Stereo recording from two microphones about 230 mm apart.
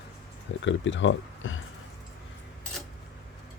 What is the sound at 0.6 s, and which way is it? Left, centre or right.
Speech, left.